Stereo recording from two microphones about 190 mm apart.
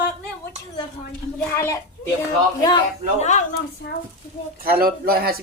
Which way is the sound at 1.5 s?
15° left (ahead or behind).